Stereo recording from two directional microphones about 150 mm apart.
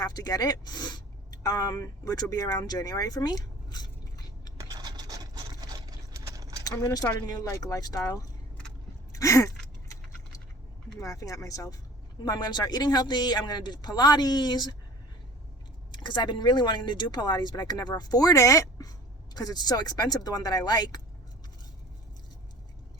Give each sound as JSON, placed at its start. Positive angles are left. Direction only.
{"t": 0.0, "sound": "speech", "side_deg": 25}
{"t": 4.7, "sound": "vehicle", "side_deg": -25}
{"t": 6.7, "sound": "speech", "side_deg": 25}
{"t": 9.1, "sound": "gasp", "side_deg": 20}
{"t": 11.0, "sound": "speech", "side_deg": 20}
{"t": 16.0, "sound": "speech", "side_deg": 30}